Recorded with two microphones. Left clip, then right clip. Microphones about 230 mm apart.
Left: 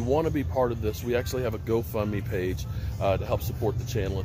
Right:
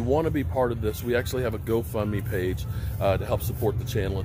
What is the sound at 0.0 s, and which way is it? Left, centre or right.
Speech, centre.